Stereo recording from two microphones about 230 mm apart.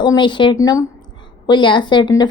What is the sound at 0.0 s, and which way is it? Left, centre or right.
A woman's voice, centre.